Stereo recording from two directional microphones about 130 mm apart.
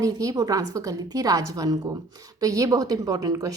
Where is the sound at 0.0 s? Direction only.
25° right (ahead or behind).